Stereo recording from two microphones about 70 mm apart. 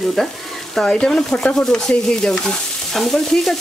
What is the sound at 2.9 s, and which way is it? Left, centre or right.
Speech, centre.